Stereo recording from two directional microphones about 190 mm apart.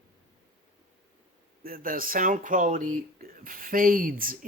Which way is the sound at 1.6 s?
50° right (ahead or behind).